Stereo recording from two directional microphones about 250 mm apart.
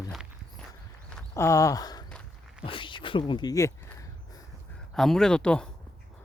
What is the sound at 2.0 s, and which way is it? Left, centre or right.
Walk, centre.